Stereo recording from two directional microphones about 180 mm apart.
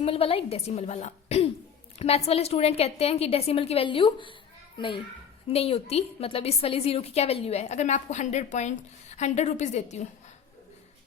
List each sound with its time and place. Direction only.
0.0 s a woman's voice: 30° left (ahead or behind)